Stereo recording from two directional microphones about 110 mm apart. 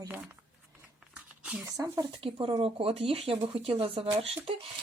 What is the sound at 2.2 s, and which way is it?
Speech, 50° right (ahead or behind).